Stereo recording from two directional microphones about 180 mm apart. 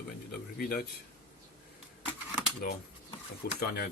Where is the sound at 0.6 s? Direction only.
55° left (ahead or behind).